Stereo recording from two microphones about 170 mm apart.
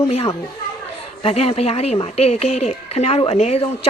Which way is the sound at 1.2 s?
35° left (ahead or behind).